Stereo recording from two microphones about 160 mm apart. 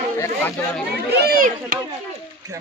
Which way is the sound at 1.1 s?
80° right.